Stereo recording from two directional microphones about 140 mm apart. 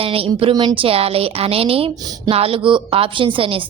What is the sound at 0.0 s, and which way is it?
A woman's voice, 40° right (ahead or behind).